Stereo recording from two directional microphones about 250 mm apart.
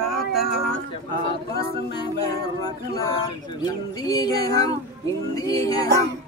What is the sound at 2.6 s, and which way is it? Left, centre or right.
Speech, centre.